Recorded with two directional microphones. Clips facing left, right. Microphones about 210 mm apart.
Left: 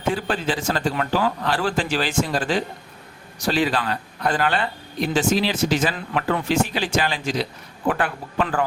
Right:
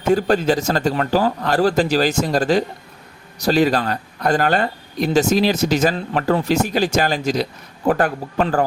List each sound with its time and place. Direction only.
0.1 s speech: 45° right (ahead or behind)